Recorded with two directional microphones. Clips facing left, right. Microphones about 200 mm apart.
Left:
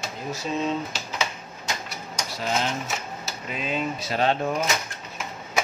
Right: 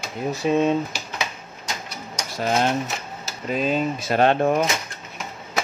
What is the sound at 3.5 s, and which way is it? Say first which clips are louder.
Speech: right 6 dB; 40° right (ahead or behind).